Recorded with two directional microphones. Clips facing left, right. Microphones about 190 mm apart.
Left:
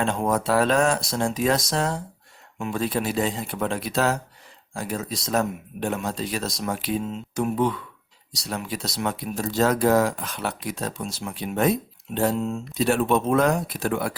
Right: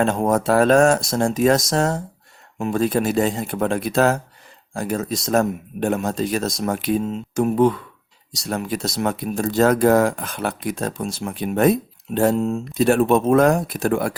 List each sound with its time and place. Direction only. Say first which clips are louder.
0.0 s speech: right 5 dB; 45° right (ahead or behind)